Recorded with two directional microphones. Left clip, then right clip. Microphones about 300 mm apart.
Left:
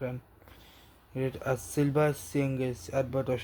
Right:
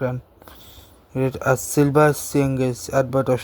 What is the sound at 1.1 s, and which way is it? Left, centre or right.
Speech, right.